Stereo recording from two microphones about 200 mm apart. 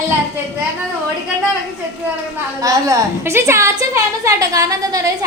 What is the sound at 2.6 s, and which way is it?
A woman's voice, 15° right (ahead or behind).